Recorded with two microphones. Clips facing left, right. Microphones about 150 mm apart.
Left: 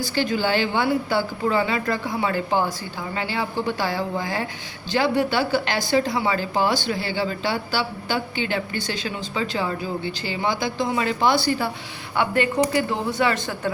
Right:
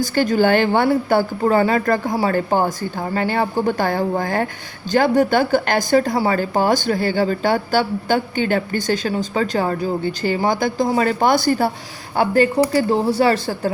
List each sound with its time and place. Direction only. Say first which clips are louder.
0.0 s a woman's voice: right 7 dB; 45° right (ahead or behind)